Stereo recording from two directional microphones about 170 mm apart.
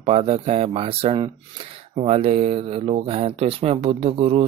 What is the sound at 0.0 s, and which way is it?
Speech, 35° right (ahead or behind).